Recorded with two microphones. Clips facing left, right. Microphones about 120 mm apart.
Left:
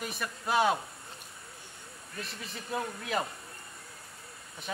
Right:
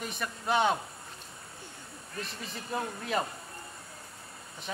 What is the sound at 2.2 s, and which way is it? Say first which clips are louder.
Speech: right 2 dB; centre (ahead or behind).